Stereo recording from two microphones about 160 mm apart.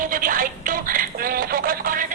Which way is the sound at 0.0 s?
60° right (ahead or behind).